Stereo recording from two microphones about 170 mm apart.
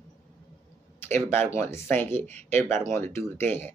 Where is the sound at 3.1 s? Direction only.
15° left (ahead or behind).